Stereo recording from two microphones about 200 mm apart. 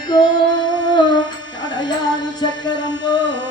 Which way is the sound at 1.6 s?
20° left (ahead or behind).